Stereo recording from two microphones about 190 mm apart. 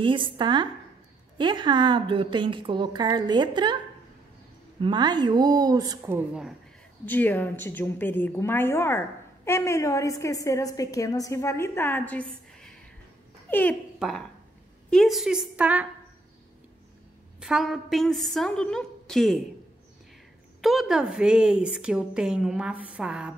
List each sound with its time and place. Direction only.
0.0 s a woman's voice: 25° right (ahead or behind); by 6.5 s 10° right (ahead or behind)
7.1 s a woman's voice: 10° left (ahead or behind)
13.5 s a woman's voice: 10° left (ahead or behind); by 15.9 s 10° right (ahead or behind)
17.4 s a woman's voice: 5° right (ahead or behind)
20.6 s a woman's voice: centre (ahead or behind)